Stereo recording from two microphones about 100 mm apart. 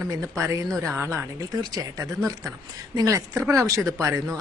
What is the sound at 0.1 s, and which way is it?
A woman's voice, 30° right (ahead or behind).